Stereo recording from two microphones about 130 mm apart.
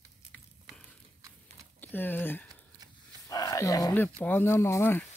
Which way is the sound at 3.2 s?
25° left (ahead or behind).